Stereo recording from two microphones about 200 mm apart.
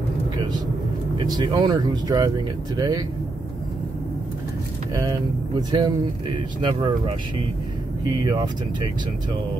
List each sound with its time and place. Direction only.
1.1 s speech: 20° right (ahead or behind)
5.0 s speech: 20° right (ahead or behind)
8.2 s speech: 20° right (ahead or behind)